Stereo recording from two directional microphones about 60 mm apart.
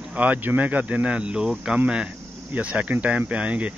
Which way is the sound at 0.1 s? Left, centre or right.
Right.